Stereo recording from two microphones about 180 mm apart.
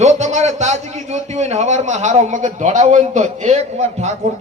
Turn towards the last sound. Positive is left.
turn(degrees=-40)  # may be behind; listen again after turning